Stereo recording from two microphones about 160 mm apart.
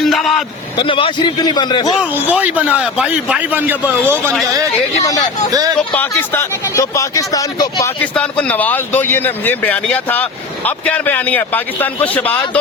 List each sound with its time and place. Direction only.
0.0 s a man's voice: centre (ahead or behind)
0.8 s speech: 35° left (ahead or behind)
2.0 s speech: 10° right (ahead or behind)
5.0 s speech: 20° left (ahead or behind)
5.5 s speech: 20° right (ahead or behind)
5.9 s speech: 10° left (ahead or behind)
8.0 s speech: 10° left (ahead or behind)